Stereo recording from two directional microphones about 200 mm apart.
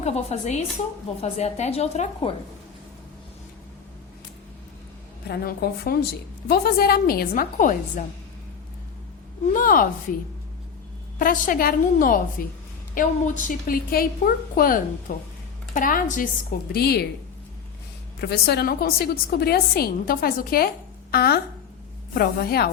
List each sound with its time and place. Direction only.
0.0 s a woman's voice: 35° left (ahead or behind)
5.3 s a woman's voice: 50° left (ahead or behind)
9.5 s a woman's voice: 45° left (ahead or behind)
11.2 s a woman's voice: 45° left (ahead or behind)
18.2 s a woman's voice: 55° left (ahead or behind)